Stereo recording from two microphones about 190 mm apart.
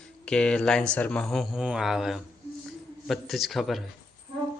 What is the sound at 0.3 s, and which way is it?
Speech, 5° left (ahead or behind).